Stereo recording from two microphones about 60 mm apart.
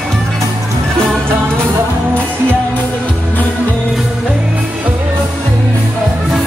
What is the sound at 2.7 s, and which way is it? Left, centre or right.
Music, left.